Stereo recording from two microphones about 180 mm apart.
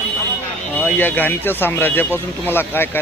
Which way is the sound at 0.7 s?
10° left (ahead or behind).